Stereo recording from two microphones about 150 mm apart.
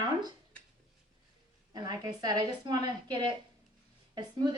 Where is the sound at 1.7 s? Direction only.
25° right (ahead or behind).